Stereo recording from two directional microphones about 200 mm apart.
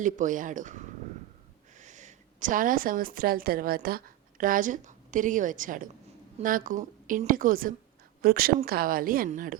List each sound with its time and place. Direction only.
0.0 s a woman's voice: 40° right (ahead or behind)